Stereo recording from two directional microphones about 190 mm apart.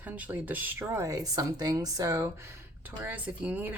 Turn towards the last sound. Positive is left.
turn(degrees=-10)  # may be behind; listen again after turning